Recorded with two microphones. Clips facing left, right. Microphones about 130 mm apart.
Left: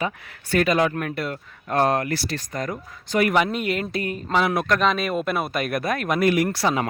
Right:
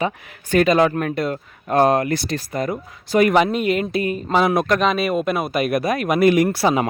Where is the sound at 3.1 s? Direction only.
20° right (ahead or behind).